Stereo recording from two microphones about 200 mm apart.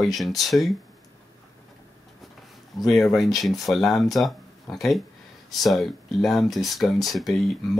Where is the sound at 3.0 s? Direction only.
Centre (ahead or behind).